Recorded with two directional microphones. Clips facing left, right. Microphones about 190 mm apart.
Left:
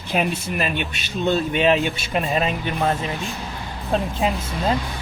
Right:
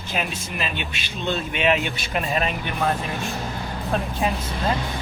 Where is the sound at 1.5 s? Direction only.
35° left (ahead or behind).